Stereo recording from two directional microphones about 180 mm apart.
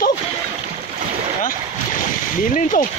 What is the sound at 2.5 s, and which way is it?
Speech, 45° left (ahead or behind).